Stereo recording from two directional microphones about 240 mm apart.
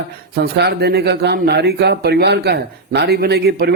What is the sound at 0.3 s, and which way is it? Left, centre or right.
Speech, right.